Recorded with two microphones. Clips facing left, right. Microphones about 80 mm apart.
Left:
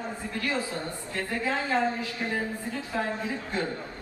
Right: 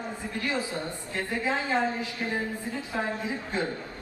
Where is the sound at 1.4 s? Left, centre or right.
Centre.